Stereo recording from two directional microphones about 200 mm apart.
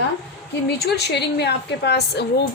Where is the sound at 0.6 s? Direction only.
55° left (ahead or behind).